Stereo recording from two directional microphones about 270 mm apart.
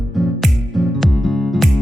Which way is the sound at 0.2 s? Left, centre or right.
Centre.